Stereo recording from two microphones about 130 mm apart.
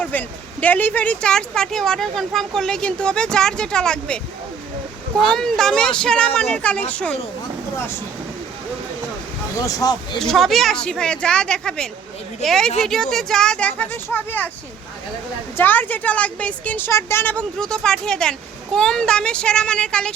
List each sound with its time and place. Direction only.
0.0 s a woman's voice: 10° left (ahead or behind)
5.3 s a woman's voice: 5° left (ahead or behind)
9.6 s speech: 30° left (ahead or behind)
10.2 s speech: centre (ahead or behind)
15.5 s a woman's voice: 15° left (ahead or behind)